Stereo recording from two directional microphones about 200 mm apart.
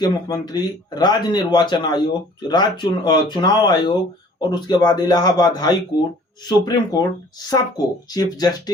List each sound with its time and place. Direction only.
0.0 s speech: 20° left (ahead or behind)